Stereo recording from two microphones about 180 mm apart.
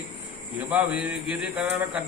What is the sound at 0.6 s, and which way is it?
A man's voice, 10° right (ahead or behind).